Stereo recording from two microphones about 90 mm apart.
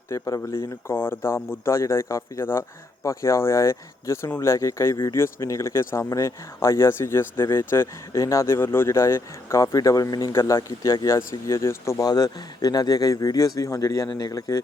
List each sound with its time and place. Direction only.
0.1 s speech: 35° left (ahead or behind)
12.0 s speech: 45° left (ahead or behind)